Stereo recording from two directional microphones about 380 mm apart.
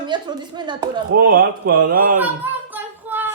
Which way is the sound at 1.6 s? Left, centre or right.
Right.